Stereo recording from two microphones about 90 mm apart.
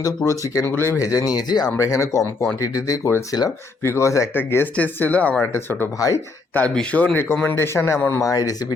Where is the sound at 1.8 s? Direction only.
35° left (ahead or behind); by 5.4 s 15° left (ahead or behind).